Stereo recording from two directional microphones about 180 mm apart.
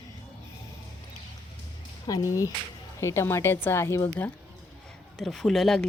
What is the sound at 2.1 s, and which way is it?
A woman's voice, 20° left (ahead or behind).